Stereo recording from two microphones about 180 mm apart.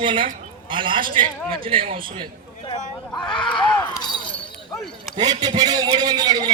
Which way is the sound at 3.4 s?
25° left (ahead or behind).